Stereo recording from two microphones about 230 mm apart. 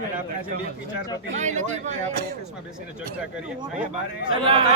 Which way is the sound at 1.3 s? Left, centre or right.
Right.